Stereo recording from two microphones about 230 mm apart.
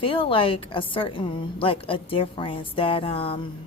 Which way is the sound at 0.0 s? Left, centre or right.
Left.